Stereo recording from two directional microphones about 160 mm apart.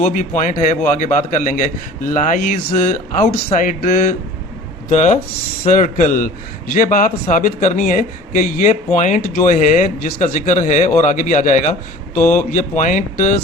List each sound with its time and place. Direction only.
0.1 s a man's voice: 55° left (ahead or behind)